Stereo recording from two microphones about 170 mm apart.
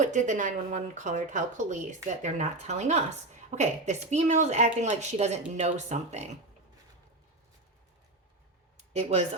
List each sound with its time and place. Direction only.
0.0 s speech: 45° right (ahead or behind)
8.9 s speech: 40° right (ahead or behind)